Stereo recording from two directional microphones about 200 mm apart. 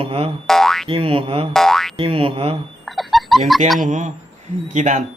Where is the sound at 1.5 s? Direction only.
Centre (ahead or behind).